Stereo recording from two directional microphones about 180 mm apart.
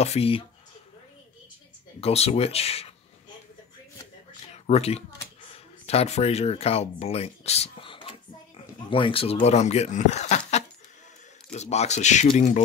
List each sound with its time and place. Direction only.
0.0 s speech: 35° left (ahead or behind)
2.0 s speech: 35° left (ahead or behind)
4.6 s speech: 35° left (ahead or behind)